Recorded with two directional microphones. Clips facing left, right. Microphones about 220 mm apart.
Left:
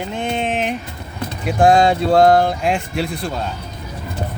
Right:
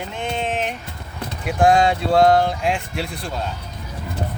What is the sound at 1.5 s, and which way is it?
Speech, 35° left (ahead or behind).